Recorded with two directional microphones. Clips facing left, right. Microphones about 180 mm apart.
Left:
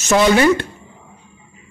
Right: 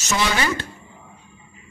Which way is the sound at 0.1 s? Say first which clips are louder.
Left 10 dB; 60° left (ahead or behind).